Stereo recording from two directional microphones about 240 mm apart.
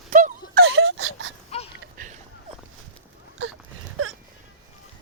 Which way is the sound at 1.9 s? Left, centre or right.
Right.